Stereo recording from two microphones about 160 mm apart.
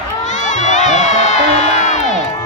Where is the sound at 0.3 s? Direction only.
50° left (ahead or behind).